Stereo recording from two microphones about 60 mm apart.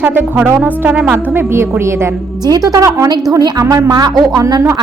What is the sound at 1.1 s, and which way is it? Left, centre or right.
A woman's voice, right.